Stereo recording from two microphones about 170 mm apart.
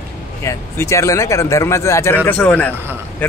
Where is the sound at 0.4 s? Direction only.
15° left (ahead or behind).